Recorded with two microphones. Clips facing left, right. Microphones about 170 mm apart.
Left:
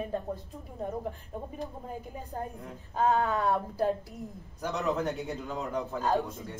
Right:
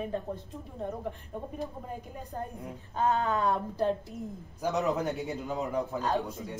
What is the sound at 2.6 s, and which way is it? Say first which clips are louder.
A woman's voice: left 2 dB; centre (ahead or behind).